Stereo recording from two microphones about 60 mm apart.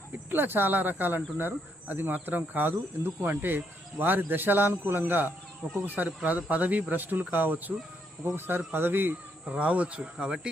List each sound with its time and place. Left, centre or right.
0.3 s speech: right
9.5 s speech: right